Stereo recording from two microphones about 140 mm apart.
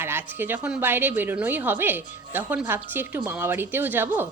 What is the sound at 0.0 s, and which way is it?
A woman's voice, 15° right (ahead or behind).